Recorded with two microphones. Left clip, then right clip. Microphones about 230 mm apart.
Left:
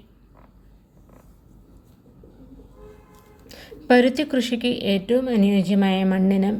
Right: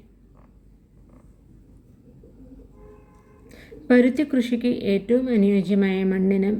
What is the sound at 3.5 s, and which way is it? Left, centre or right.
Speech, left.